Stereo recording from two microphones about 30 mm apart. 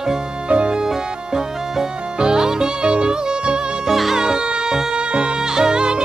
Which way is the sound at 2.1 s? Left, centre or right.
Right.